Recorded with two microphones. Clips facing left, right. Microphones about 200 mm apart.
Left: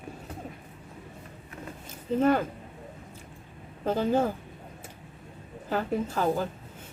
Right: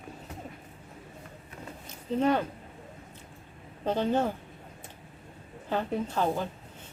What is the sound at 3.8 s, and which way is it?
Speech, 5° left (ahead or behind).